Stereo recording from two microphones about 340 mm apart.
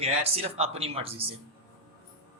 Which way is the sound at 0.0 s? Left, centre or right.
Centre.